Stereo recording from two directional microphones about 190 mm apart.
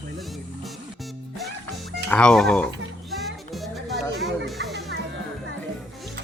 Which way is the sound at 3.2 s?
Centre (ahead or behind).